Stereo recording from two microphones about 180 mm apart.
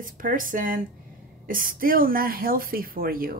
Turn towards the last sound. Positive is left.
turn(degrees=-55)  # may be behind; listen again after turning